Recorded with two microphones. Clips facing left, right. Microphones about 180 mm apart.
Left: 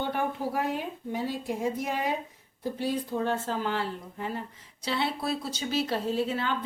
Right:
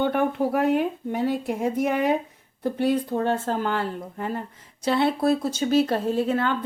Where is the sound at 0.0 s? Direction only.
60° right (ahead or behind).